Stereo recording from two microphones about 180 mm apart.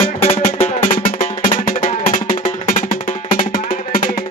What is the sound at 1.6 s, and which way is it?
Music, 50° left (ahead or behind).